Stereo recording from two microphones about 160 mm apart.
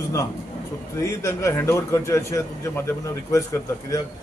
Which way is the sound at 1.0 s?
20° left (ahead or behind).